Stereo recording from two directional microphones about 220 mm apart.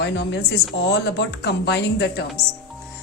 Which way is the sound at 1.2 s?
50° left (ahead or behind).